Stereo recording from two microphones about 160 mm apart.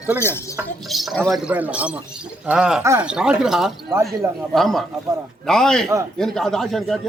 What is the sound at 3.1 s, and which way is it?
Speech, 5° right (ahead or behind).